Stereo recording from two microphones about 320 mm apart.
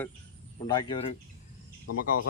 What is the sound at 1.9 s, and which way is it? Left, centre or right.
Speech, left.